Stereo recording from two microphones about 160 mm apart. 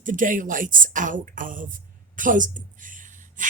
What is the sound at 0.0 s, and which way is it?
A woman's voice, 55° right (ahead or behind).